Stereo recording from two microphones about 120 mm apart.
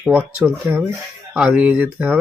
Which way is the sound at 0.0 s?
15° right (ahead or behind).